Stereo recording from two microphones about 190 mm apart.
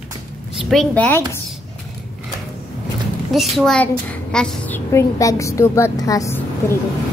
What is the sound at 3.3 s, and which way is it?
A child's voice, centre (ahead or behind).